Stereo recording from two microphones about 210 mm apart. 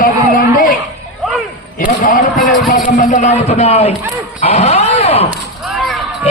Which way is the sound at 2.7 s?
35° left (ahead or behind).